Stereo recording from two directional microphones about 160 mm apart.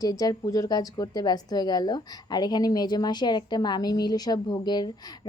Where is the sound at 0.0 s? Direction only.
25° left (ahead or behind).